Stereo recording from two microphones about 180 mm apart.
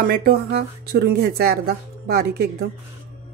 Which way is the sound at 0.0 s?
55° right (ahead or behind).